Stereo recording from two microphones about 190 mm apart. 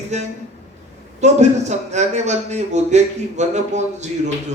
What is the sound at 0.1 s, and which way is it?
A man's voice, 35° right (ahead or behind).